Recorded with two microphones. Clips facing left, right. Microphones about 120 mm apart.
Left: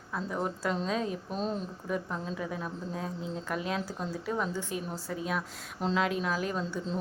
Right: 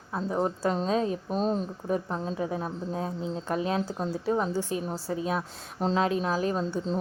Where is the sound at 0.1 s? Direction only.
30° right (ahead or behind).